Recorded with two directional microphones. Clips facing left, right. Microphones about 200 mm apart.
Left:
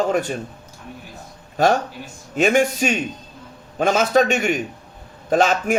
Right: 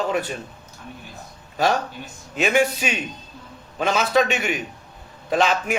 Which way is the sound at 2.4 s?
45° left (ahead or behind).